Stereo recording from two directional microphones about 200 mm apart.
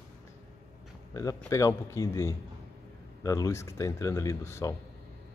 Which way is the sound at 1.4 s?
15° left (ahead or behind).